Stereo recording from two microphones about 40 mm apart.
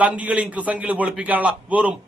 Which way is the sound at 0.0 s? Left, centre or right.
Right.